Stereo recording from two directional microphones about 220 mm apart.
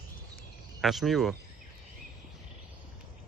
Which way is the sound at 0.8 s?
Centre (ahead or behind).